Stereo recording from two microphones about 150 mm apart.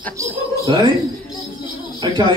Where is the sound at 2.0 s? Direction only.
30° right (ahead or behind).